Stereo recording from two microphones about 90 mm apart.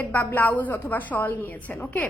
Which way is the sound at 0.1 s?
20° left (ahead or behind).